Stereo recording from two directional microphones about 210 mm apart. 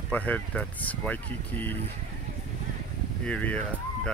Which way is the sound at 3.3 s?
5° left (ahead or behind).